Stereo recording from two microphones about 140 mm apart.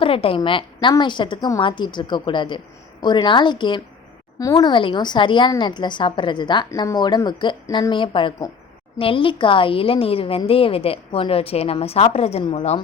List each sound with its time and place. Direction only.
0.0 s a woman's voice: 40° left (ahead or behind)